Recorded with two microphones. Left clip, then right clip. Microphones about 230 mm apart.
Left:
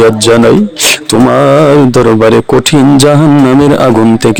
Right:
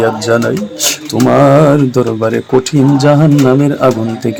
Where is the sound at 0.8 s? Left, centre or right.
Left.